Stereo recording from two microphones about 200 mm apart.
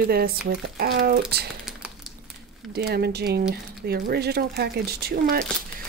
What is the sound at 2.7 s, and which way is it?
Speech, 55° right (ahead or behind).